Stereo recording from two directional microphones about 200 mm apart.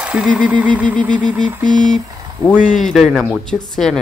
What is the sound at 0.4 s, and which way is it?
Vehicle, 5° right (ahead or behind).